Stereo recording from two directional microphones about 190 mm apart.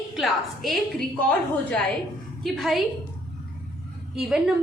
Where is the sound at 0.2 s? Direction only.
Centre (ahead or behind).